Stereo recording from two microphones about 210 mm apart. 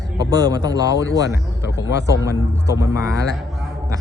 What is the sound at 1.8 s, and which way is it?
Speech, 60° left (ahead or behind).